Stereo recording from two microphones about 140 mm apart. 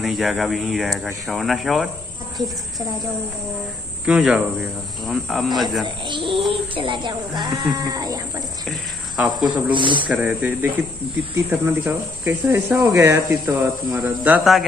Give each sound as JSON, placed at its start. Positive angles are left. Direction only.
{"t": 0.0, "sound": "speech", "side_deg": 0}
{"t": 4.0, "sound": "speech", "side_deg": -5}
{"t": 5.9, "sound": "speech", "side_deg": -35}
{"t": 8.6, "sound": "cricket", "side_deg": -5}
{"t": 9.5, "sound": "speech", "side_deg": -35}
{"t": 10.0, "sound": "speech", "side_deg": -10}